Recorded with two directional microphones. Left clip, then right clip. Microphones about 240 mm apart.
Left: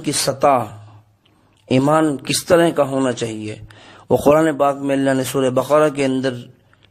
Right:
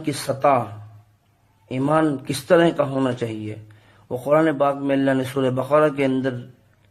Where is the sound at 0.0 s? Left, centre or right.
Left.